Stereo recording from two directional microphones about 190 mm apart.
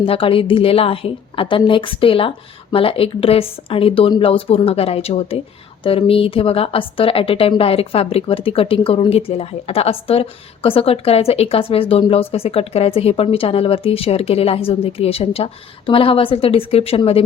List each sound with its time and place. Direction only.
0.0 s a woman's voice: 30° left (ahead or behind)